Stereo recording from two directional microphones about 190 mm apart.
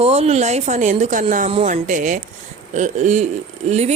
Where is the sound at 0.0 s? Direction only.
35° right (ahead or behind).